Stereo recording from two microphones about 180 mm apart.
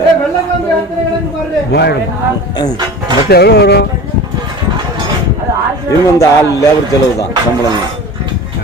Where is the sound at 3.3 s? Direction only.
65° left (ahead or behind).